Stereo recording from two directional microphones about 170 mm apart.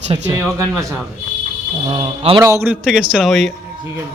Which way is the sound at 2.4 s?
15° right (ahead or behind).